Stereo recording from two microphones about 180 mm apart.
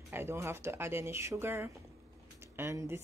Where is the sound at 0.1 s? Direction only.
15° right (ahead or behind).